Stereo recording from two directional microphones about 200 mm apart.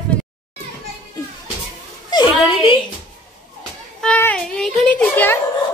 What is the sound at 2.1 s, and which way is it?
Speech, 25° left (ahead or behind).